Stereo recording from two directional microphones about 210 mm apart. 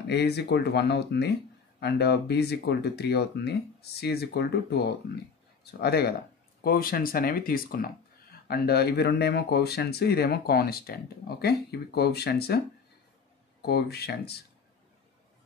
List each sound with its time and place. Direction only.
0.0 s speech: 55° left (ahead or behind)
13.6 s speech: 50° left (ahead or behind)